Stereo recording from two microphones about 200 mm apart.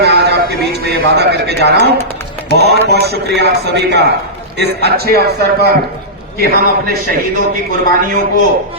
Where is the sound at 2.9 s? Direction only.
55° right (ahead or behind).